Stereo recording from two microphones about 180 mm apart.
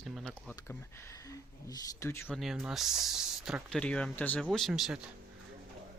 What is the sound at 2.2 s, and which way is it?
Speech, centre (ahead or behind).